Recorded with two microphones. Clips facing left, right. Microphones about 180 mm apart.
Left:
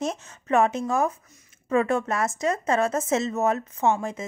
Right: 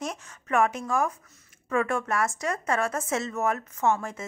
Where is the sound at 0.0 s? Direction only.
25° left (ahead or behind).